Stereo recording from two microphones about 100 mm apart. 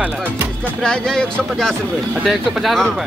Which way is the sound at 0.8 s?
5° left (ahead or behind).